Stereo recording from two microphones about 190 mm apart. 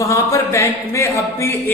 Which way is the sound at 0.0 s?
15° left (ahead or behind).